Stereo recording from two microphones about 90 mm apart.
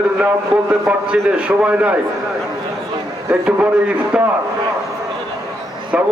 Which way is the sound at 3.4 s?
15° right (ahead or behind).